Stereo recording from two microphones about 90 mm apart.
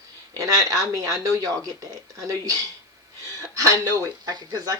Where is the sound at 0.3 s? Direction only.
40° right (ahead or behind).